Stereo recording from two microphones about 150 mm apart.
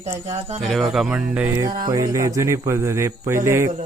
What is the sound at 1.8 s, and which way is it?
Speech, 25° right (ahead or behind).